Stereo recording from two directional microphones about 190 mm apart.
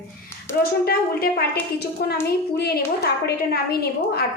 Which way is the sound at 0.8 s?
55° left (ahead or behind).